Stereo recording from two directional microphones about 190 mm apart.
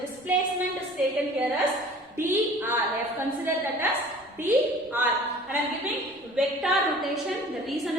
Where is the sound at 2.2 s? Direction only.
10° right (ahead or behind).